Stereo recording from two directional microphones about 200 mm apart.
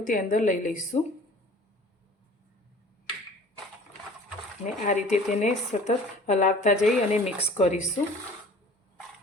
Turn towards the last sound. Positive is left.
turn(degrees=35)  # may be behind; listen again after turning